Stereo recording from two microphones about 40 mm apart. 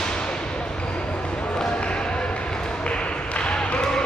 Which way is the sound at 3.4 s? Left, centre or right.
Left.